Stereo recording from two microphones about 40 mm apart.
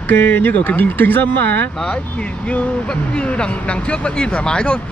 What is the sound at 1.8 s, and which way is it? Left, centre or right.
Speech, left.